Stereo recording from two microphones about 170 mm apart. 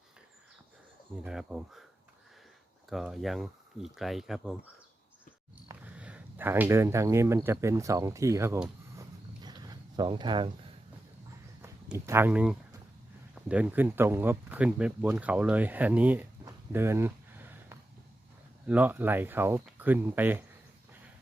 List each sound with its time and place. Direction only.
1.2 s speech: 5° right (ahead or behind)
2.9 s speech: centre (ahead or behind)
5.6 s speech: 10° right (ahead or behind)
9.0 s a sound: 25° right (ahead or behind)
11.6 s speech: 15° right (ahead or behind)
16.5 s a sound: 15° right (ahead or behind)
18.6 s speech: 10° right (ahead or behind)